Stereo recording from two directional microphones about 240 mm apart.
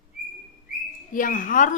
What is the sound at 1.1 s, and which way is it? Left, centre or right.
Speech, left.